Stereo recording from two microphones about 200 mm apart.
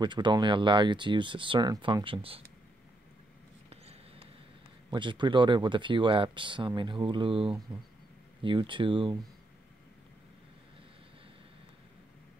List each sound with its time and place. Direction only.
0.0 s speech: 20° right (ahead or behind)
3.7 s basketball bounce: 30° right (ahead or behind)
4.9 s speech: 25° right (ahead or behind)